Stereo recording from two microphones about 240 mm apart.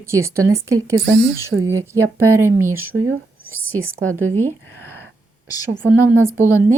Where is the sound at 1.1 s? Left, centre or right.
Right.